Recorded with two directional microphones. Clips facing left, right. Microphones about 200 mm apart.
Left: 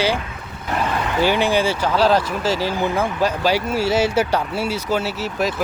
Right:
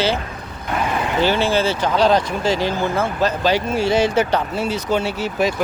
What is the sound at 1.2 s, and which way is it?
Speech, 15° left (ahead or behind).